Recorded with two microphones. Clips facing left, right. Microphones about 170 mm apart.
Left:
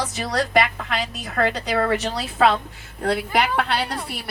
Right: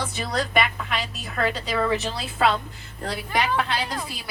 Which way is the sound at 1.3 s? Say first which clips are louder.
Left 3 dB; 65° left (ahead or behind).